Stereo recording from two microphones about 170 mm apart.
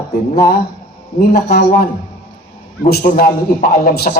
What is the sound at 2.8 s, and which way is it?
Speech, 60° left (ahead or behind).